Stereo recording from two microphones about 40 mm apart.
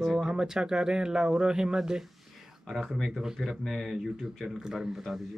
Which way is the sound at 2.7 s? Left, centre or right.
Centre.